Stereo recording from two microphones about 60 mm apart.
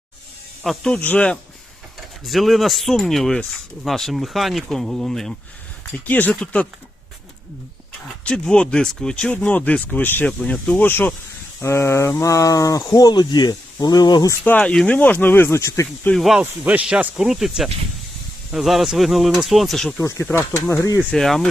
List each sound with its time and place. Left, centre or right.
0.8 s speech: centre
1.0 s speech: left
2.2 s speech: centre
5.9 s speech: left
8.2 s speech: centre; by 10.2 s left
10.2 s speech: centre
10.8 s speech: left
11.6 s speech: left
14.6 s speech: centre; by 15.9 s left
16.1 s speech: centre
16.4 s speech: right
17.2 s speech: centre
20.3 s speech: left
21.2 s speech: centre